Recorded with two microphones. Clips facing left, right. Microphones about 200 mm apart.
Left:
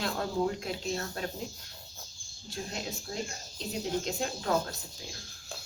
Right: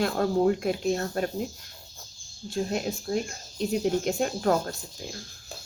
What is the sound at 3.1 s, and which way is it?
Speech, 55° right (ahead or behind).